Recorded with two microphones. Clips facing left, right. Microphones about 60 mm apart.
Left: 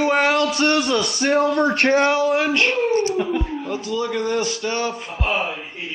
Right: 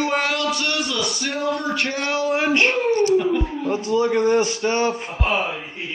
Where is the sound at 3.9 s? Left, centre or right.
Centre.